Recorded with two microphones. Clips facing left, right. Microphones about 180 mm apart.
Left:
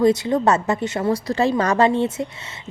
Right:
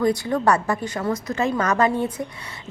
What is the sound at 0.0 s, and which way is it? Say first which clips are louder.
A woman's voice: left 3 dB; 20° left (ahead or behind).